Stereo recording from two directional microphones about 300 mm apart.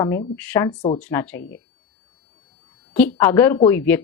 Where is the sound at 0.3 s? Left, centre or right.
Centre.